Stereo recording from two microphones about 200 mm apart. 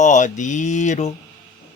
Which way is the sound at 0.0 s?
35° left (ahead or behind).